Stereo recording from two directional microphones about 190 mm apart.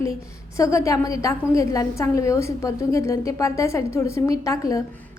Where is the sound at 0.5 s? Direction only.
15° left (ahead or behind).